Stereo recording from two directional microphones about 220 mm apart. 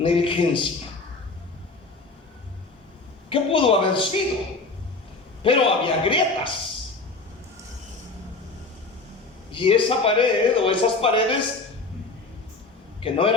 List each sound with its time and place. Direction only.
0.0 s a man's voice: 25° left (ahead or behind)
3.2 s a man's voice: 25° left (ahead or behind)
5.4 s a man's voice: 25° left (ahead or behind)
9.5 s a man's voice: 25° left (ahead or behind)
13.0 s a man's voice: 25° left (ahead or behind)